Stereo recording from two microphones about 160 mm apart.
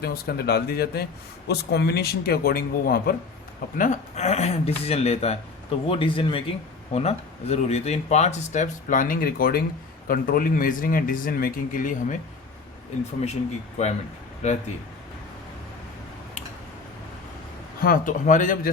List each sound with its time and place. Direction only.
0.0 s speech: 80° left
1.5 s speech: 90° left; by 3.2 s 70° left (ahead or behind)
3.8 s a man's voice: 50° left (ahead or behind)
13.8 s speech: 45° left (ahead or behind)
17.7 s a man's voice: 60° left (ahead or behind)